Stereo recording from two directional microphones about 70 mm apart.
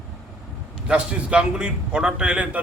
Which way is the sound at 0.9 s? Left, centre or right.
Centre.